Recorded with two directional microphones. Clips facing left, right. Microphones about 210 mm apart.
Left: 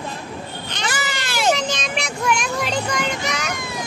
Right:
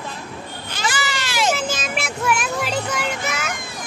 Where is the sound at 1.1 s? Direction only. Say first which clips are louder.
Right 1 dB; 55° left (ahead or behind).